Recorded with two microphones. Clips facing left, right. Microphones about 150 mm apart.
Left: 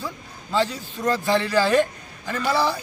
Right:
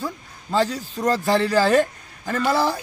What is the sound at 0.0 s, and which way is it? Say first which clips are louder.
A man's voice: right 3 dB; 40° right (ahead or behind).